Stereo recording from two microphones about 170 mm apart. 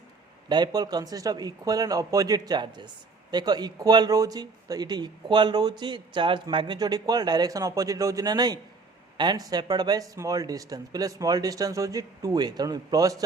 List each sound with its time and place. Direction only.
0.4 s a man's voice: 25° right (ahead or behind)